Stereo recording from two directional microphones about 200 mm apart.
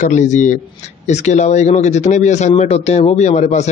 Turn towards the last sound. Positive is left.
turn(degrees=35)  # may be behind; listen again after turning